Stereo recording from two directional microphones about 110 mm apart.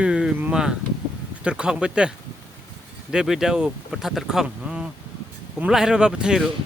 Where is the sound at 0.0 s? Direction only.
10° right (ahead or behind).